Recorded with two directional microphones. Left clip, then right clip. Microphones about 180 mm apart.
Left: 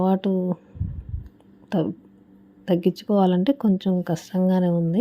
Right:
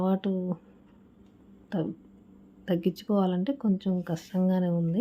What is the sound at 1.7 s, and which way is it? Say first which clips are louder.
Speech: left 8 dB; 30° left (ahead or behind).